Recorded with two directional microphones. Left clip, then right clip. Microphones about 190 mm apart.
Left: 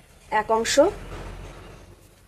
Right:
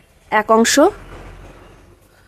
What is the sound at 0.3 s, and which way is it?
Speech, 50° right (ahead or behind).